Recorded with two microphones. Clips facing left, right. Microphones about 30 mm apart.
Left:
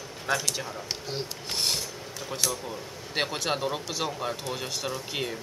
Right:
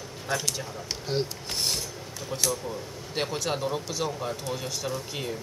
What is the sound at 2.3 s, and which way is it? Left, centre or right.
Speech, centre.